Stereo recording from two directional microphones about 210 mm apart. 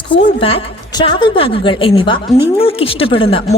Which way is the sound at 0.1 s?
25° left (ahead or behind).